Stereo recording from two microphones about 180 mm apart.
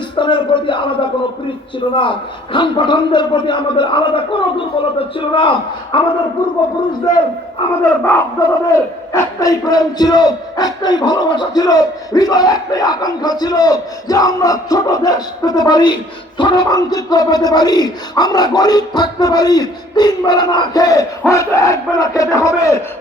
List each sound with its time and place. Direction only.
0.2 s speech: 25° left (ahead or behind)
7.9 s speech: 10° left (ahead or behind)